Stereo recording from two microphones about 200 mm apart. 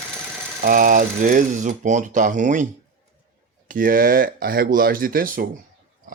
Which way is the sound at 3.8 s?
45° right (ahead or behind).